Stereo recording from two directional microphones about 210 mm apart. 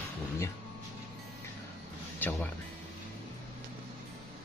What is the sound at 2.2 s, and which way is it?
Music, 10° left (ahead or behind).